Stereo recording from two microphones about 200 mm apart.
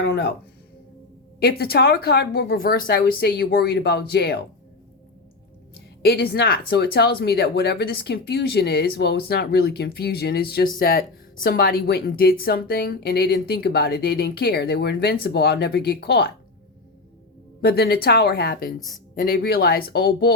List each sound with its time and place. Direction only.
0.0 s music: 55° left (ahead or behind)
1.4 s speech: 50° left (ahead or behind)
6.0 s speech: 50° left (ahead or behind)
17.6 s speech: 50° left (ahead or behind)